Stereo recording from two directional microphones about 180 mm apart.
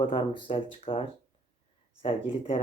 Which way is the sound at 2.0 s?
30° left (ahead or behind).